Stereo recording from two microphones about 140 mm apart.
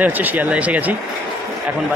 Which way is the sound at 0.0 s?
10° right (ahead or behind).